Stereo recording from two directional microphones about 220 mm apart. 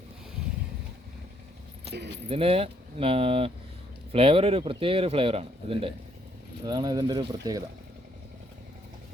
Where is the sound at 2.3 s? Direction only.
25° right (ahead or behind).